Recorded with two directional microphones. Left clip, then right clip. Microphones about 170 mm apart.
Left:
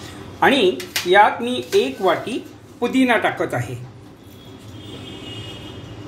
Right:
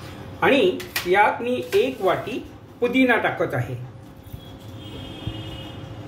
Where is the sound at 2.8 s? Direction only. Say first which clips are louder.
Left 2 dB; 35° left (ahead or behind).